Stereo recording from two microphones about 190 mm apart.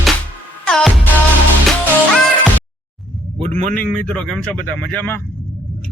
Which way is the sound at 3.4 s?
40° right (ahead or behind).